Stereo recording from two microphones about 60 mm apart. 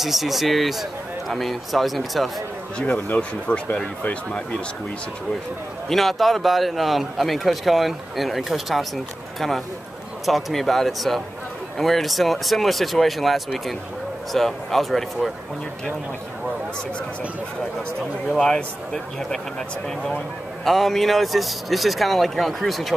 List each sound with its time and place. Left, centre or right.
0.0 s a man's voice: centre
2.8 s speech: left
5.9 s a man's voice: centre
20.6 s a man's voice: centre